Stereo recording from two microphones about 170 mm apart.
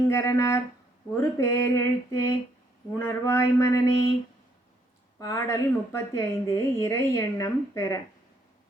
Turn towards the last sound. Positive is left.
turn(degrees=20)  # may be behind; listen again after turning